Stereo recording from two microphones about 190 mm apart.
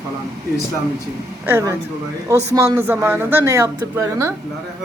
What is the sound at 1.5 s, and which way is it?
A woman's voice, 15° right (ahead or behind).